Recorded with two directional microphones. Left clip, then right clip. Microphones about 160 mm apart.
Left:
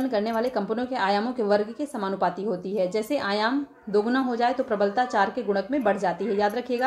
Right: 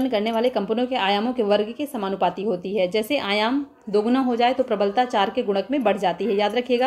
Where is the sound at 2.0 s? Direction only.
50° right (ahead or behind).